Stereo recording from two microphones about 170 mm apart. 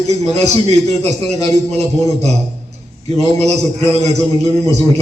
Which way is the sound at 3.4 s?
40° right (ahead or behind).